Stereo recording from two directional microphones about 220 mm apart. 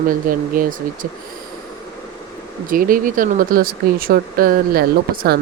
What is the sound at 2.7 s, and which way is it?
Speech, 40° right (ahead or behind).